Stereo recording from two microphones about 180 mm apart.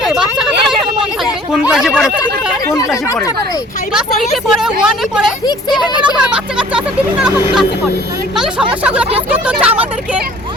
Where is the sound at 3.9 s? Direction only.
Centre (ahead or behind).